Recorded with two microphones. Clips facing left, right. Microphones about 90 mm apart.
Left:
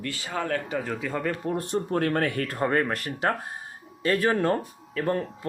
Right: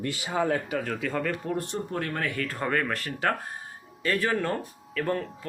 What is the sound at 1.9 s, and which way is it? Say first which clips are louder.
Speech: left 7 dB; 50° left (ahead or behind).